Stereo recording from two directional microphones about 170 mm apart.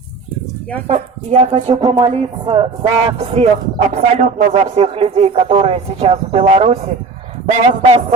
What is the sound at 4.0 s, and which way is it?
Speech, 45° right (ahead or behind).